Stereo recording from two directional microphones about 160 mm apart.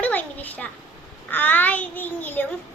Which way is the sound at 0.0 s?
10° left (ahead or behind).